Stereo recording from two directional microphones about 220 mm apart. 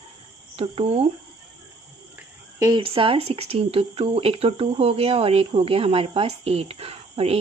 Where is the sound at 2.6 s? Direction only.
20° right (ahead or behind).